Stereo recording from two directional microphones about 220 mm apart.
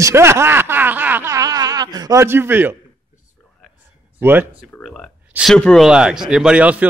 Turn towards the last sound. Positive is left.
turn(degrees=-5)  # may be behind; listen again after turning